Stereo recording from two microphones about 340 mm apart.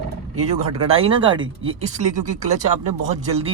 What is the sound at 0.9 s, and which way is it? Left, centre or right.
Speech, centre.